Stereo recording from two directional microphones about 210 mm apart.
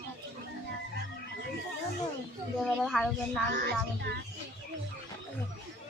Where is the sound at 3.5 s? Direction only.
50° right (ahead or behind).